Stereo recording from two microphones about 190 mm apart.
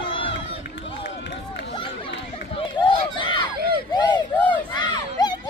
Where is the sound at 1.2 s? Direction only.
65° left (ahead or behind).